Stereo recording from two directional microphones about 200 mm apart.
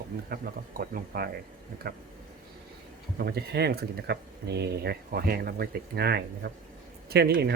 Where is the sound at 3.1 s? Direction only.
50° right (ahead or behind).